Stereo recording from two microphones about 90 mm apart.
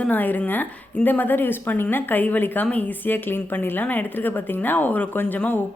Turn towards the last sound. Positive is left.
turn(degrees=20)  # may be behind; listen again after turning